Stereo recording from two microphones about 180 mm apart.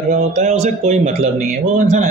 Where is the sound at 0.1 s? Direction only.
40° right (ahead or behind).